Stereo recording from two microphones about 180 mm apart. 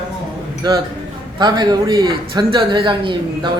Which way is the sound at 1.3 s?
25° right (ahead or behind).